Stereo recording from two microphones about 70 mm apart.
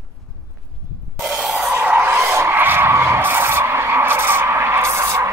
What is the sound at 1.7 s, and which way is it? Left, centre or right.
Skidding, right.